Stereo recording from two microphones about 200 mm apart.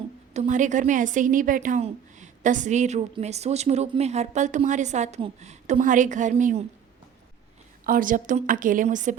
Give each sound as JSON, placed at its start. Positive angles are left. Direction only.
{"t": 0.3, "sound": "a woman's voice", "side_deg": -40}
{"t": 7.9, "sound": "a woman's voice", "side_deg": -45}